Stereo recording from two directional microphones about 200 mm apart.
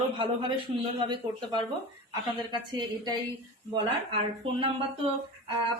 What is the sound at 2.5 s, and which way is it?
Speech, 20° right (ahead or behind).